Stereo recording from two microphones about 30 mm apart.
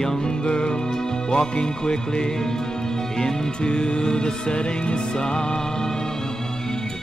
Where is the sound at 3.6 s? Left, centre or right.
Left.